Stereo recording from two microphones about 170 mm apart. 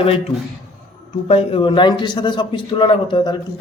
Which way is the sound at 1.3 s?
35° left (ahead or behind).